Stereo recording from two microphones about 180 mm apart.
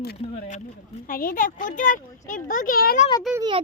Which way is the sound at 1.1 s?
50° left (ahead or behind).